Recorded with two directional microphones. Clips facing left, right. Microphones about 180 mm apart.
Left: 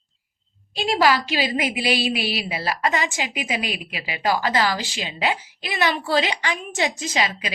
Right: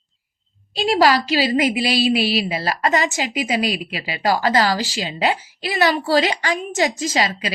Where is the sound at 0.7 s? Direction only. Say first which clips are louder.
Right 3 dB; 40° right (ahead or behind).